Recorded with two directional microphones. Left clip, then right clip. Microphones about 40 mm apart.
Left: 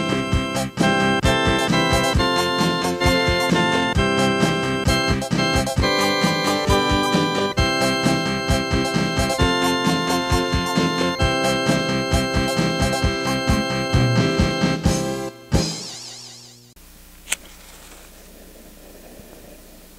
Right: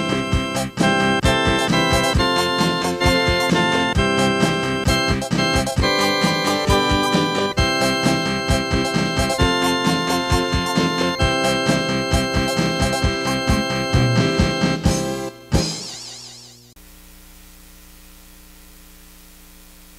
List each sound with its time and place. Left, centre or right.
0.0 s music: left
5.1 s music: left
12.7 s music: left